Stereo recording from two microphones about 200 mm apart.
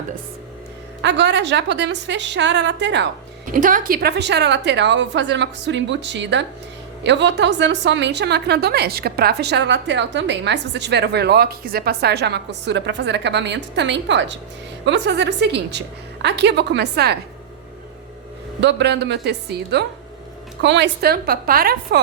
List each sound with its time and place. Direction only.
1.0 s a woman's voice: 60° right (ahead or behind)
3.4 s a woman's voice: 40° right (ahead or behind)
18.6 s a woman's voice: 60° right (ahead or behind)